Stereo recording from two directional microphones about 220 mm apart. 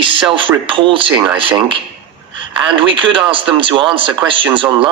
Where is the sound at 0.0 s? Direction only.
25° right (ahead or behind).